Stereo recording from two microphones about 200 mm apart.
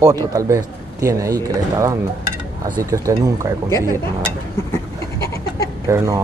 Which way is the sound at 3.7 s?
15° left (ahead or behind).